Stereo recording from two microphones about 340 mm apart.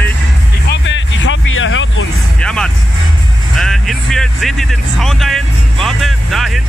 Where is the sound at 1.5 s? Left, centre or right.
Left.